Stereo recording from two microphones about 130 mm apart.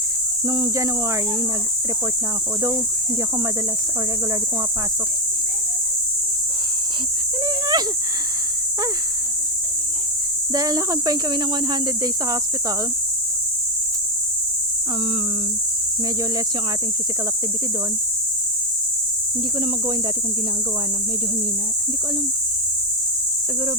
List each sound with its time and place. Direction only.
0.4 s speech: 25° right (ahead or behind)
7.4 s a sound: 30° right (ahead or behind)
10.5 s speech: 30° right (ahead or behind)